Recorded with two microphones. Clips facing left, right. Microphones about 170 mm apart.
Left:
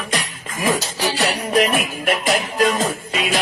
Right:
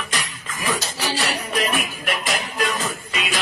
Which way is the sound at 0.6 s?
45° left (ahead or behind).